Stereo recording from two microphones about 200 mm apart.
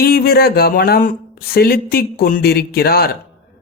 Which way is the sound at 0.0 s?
50° left (ahead or behind).